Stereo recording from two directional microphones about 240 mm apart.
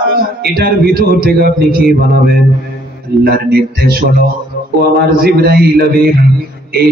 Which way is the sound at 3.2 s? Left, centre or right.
Right.